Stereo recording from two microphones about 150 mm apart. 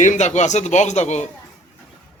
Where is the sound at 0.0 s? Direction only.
55° left (ahead or behind).